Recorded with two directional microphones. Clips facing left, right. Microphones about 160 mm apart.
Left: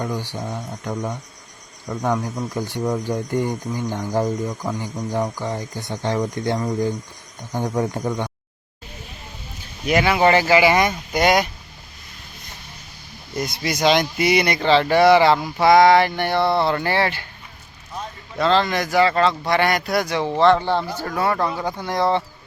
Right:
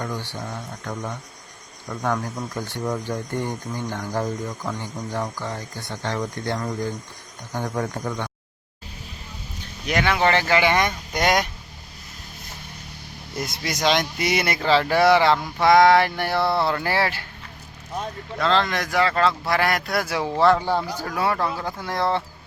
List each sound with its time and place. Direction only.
0.0 s speech: 15° left (ahead or behind)
9.8 s speech: 10° left (ahead or behind)
13.3 s speech: centre (ahead or behind)
18.3 s speech: centre (ahead or behind)